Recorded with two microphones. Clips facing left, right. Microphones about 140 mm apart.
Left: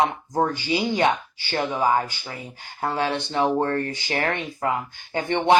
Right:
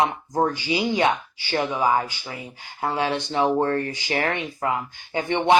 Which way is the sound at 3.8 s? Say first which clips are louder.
Even; 35° left (ahead or behind).